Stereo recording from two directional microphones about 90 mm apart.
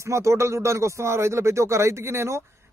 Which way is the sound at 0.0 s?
30° right (ahead or behind).